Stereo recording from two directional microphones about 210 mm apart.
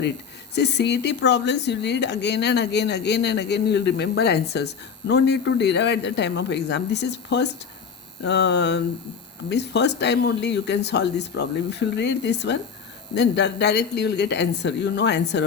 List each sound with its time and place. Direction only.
0.5 s speech: 55° left (ahead or behind)